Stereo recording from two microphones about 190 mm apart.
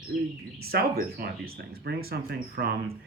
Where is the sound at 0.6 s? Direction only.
55° right (ahead or behind).